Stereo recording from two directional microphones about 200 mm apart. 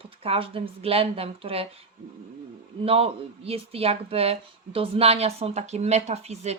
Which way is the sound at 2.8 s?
30° right (ahead or behind).